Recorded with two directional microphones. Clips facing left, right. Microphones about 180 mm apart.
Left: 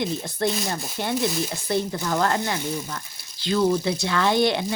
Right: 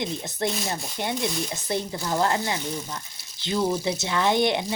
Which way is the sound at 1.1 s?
5° left (ahead or behind).